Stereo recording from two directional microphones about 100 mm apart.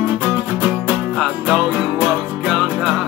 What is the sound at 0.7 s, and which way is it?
Music, 5° right (ahead or behind).